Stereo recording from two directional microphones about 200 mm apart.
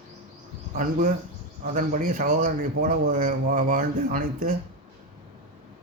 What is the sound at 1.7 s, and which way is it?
A man's voice, 40° right (ahead or behind).